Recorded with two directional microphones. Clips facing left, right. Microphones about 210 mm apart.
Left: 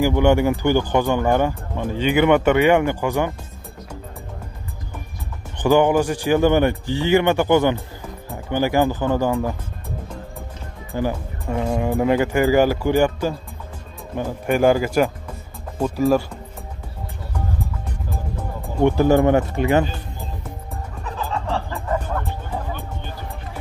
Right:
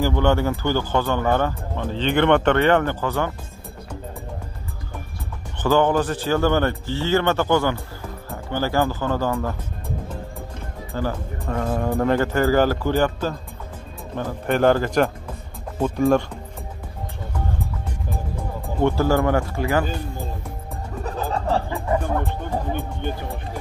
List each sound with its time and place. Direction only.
0.0 s speech: 15° left (ahead or behind)
5.6 s speech: 15° left (ahead or behind)
11.0 s speech: 10° left (ahead or behind)
18.8 s speech: 15° left (ahead or behind)
21.0 s music: 40° right (ahead or behind)
21.6 s music: 15° right (ahead or behind)